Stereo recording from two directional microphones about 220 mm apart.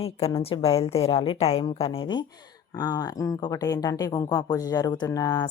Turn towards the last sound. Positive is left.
turn(degrees=15)  # may be behind; listen again after turning